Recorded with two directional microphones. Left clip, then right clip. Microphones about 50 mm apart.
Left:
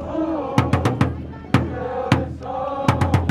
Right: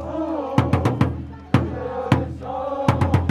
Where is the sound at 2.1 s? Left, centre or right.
Left.